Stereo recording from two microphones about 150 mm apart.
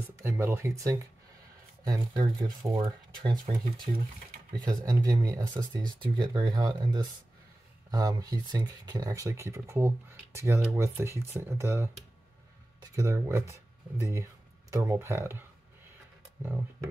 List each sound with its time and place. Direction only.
0.1 s speech: 15° right (ahead or behind)
12.9 s speech: 20° right (ahead or behind)